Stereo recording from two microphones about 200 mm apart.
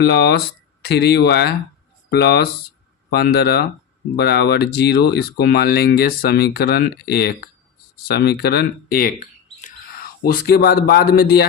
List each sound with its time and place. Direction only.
0.0 s speech: 55° left (ahead or behind)